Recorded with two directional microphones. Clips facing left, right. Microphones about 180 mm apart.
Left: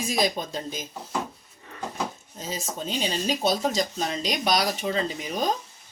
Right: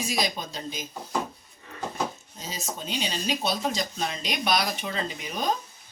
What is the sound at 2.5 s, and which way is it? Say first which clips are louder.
Speech: left 3 dB; 45° left (ahead or behind).